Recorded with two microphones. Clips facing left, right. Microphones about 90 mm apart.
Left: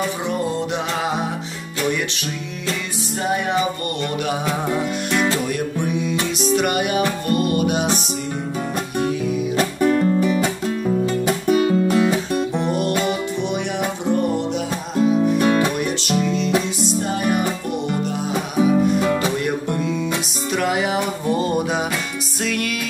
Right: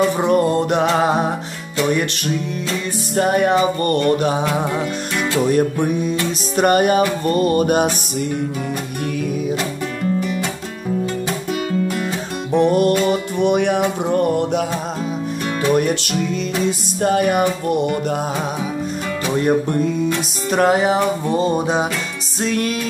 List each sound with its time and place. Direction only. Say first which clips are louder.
0.2 s music: right 7 dB; 55° right (ahead or behind)
3.2 s music: right 6 dB; 55° right (ahead or behind)
5.5 s music: right 6 dB; 40° right (ahead or behind)
9.8 s music: left 5 dB; 15° left (ahead or behind)
11.5 s music: left 5 dB; 30° left (ahead or behind)
12.5 s music: right 11 dB; 50° right (ahead or behind)
17.0 s music: right 8 dB; 60° right (ahead or behind)
20.5 s music: right 5 dB; 40° right (ahead or behind)